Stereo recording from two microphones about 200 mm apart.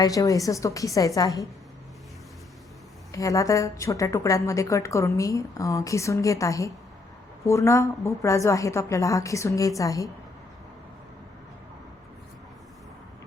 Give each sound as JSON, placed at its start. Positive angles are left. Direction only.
{"t": 0.0, "sound": "a woman's voice", "side_deg": 15}
{"t": 3.1, "sound": "a woman's voice", "side_deg": 15}